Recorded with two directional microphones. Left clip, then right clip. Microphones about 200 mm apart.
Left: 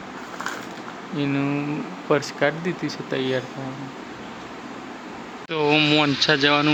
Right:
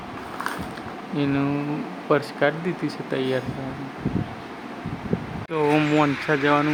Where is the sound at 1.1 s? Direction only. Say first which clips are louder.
Even; centre (ahead or behind).